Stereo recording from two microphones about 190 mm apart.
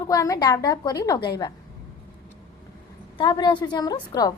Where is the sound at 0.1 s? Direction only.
20° left (ahead or behind).